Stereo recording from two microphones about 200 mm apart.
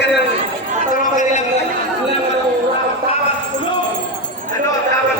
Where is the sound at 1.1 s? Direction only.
35° left (ahead or behind).